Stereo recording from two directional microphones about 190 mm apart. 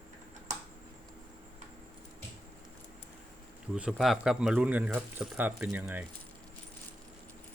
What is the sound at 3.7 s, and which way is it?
Speech, 5° right (ahead or behind).